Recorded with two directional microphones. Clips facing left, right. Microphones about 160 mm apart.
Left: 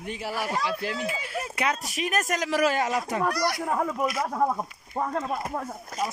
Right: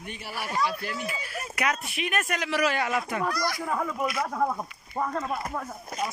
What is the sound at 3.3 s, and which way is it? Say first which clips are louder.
Speech: left 3 dB; 70° left (ahead or behind).